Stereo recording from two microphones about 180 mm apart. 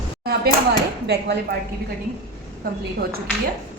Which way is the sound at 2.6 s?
55° right (ahead or behind).